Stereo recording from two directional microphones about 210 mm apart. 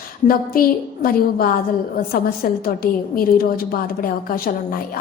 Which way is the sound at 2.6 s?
45° left (ahead or behind).